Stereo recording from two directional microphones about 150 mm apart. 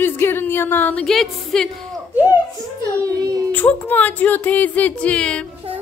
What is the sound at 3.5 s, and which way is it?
A woman's voice, 10° left (ahead or behind).